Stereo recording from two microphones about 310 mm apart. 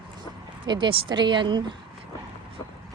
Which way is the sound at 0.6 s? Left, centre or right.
Centre.